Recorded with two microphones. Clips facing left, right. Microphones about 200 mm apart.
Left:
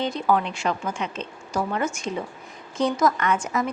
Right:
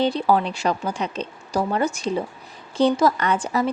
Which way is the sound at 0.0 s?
35° right (ahead or behind).